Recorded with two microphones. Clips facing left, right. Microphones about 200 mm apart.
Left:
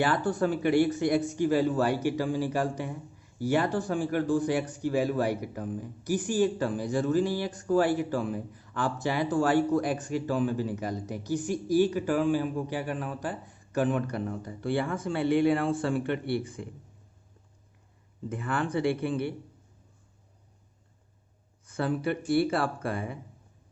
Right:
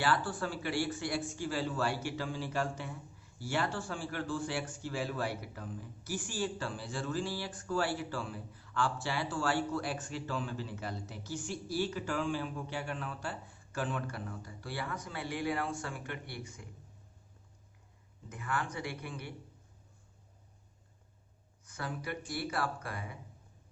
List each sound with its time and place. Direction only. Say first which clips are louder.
0.3 s speech: left 11 dB; 20° left (ahead or behind)
5.6 s speech: left 9 dB; 55° left (ahead or behind)
6.0 s speech: left 11 dB; 15° left (ahead or behind)
18.3 s speech: left 7 dB; 30° left (ahead or behind)
21.7 s speech: left 11 dB; 30° left (ahead or behind)